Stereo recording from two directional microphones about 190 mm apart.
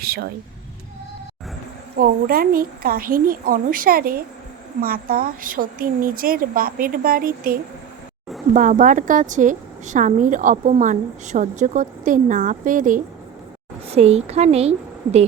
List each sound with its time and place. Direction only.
0.0 s speech: 55° right (ahead or behind)
2.0 s a woman's voice: 50° right (ahead or behind)
13.9 s speech: 35° right (ahead or behind)